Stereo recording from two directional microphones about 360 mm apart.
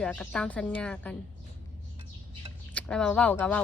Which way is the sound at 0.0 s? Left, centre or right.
Centre.